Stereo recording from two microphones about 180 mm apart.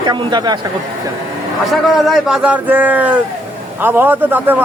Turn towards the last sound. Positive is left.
turn(degrees=-10)  # may be behind; listen again after turning